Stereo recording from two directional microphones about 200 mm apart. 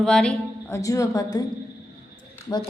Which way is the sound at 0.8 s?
15° left (ahead or behind).